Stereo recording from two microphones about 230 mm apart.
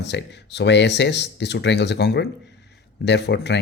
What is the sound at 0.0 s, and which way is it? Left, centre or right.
Speech, left.